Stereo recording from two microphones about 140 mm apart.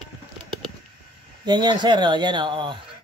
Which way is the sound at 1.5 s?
30° right (ahead or behind).